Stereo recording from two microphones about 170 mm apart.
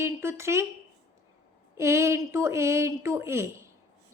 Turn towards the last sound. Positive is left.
turn(degrees=-15)  # may be behind; listen again after turning